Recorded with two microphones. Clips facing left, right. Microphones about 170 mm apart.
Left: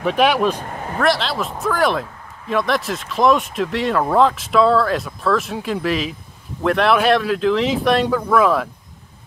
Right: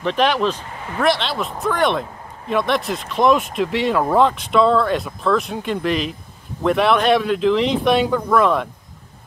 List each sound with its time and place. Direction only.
0.0 s speech: 10° left (ahead or behind)
0.6 s speech: 45° left (ahead or behind)
0.9 s speech: centre (ahead or behind)